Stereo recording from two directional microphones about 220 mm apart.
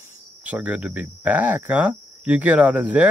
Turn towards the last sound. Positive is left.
turn(degrees=-5)  # may be behind; listen again after turning